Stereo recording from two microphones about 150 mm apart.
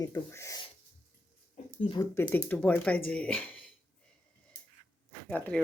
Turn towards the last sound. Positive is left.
turn(degrees=10)  # may be behind; listen again after turning